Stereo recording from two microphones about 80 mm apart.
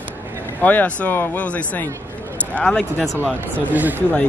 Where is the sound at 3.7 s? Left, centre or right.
Right.